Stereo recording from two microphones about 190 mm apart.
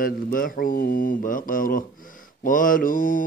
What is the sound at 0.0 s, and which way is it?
Mantra, 50° left (ahead or behind).